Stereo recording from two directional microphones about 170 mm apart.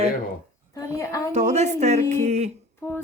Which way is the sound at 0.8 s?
20° left (ahead or behind).